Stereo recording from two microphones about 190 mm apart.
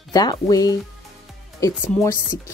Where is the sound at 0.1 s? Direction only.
20° left (ahead or behind).